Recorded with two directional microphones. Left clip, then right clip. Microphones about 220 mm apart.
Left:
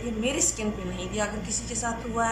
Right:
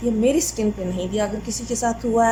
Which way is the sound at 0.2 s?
25° right (ahead or behind).